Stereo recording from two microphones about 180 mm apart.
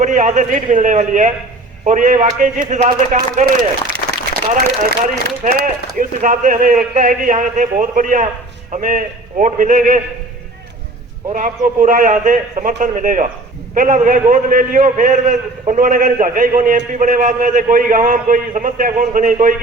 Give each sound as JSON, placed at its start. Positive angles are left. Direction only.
{"t": 0.0, "sound": "a man's voice", "side_deg": -45}
{"t": 4.5, "sound": "a man's voice", "side_deg": -50}
{"t": 11.3, "sound": "a man's voice", "side_deg": -45}